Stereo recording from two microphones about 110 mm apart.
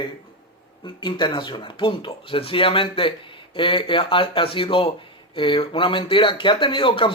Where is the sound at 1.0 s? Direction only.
45° left (ahead or behind).